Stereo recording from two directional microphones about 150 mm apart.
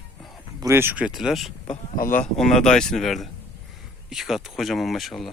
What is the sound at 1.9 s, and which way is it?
Speech, 70° left (ahead or behind).